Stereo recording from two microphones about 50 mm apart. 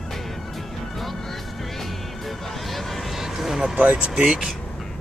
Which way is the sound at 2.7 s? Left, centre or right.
Centre.